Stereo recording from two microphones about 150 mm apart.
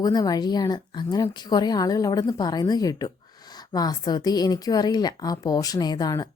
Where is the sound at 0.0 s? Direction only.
25° left (ahead or behind).